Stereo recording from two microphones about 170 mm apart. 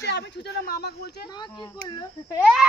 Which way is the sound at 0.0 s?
80° left.